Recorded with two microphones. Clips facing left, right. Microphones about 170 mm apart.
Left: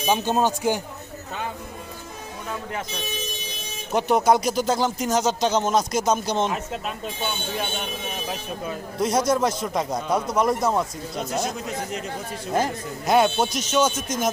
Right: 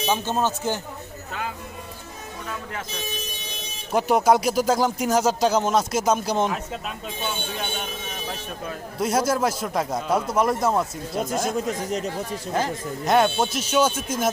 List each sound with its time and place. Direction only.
0.0 s a man's voice: 15° left (ahead or behind)
3.9 s speech: 5° right (ahead or behind)
9.0 s speech: 5° right (ahead or behind)
11.5 s speech: 45° right (ahead or behind)
13.1 s speech: centre (ahead or behind)